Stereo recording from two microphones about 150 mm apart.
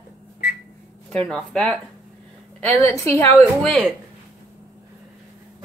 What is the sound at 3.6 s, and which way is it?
Speech, 5° left (ahead or behind).